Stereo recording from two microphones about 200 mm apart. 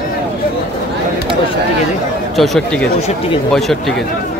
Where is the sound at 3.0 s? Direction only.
30° left (ahead or behind).